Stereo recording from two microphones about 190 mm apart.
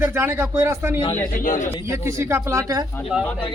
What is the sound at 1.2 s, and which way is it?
Speech, 45° left (ahead or behind).